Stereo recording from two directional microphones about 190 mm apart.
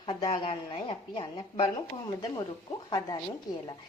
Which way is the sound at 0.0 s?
25° left (ahead or behind).